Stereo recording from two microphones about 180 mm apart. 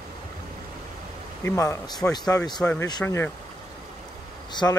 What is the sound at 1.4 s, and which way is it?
A man's voice, 15° left (ahead or behind).